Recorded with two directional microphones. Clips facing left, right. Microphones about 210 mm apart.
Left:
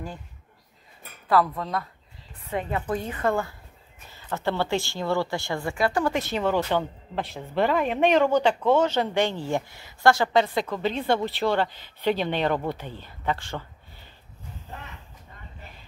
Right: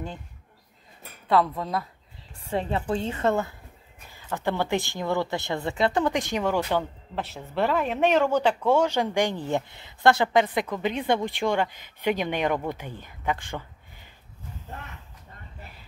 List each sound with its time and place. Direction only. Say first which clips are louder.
1.3 s speech: even; centre (ahead or behind)
2.4 s a woman's voice: right 1 dB; 30° right (ahead or behind)